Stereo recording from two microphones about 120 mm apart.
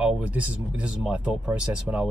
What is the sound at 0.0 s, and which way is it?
Speech, 10° right (ahead or behind).